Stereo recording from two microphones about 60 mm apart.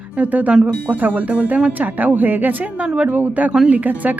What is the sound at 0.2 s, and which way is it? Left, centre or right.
A woman's voice, right.